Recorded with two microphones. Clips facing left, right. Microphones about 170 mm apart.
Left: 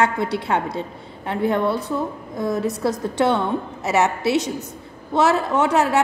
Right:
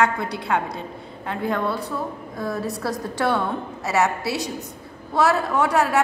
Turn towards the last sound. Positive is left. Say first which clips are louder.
# left 2 dB
turn(degrees=25)  # may be behind; listen again after turning